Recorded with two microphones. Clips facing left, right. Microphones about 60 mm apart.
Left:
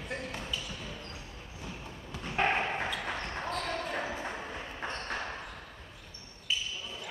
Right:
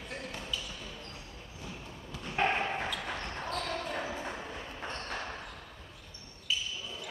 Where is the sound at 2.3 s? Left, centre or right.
Centre.